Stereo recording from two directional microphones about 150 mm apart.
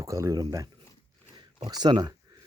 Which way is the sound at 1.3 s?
30° right (ahead or behind).